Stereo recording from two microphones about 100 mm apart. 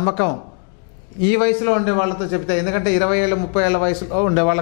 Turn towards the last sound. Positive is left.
turn(degrees=15)  # may be behind; listen again after turning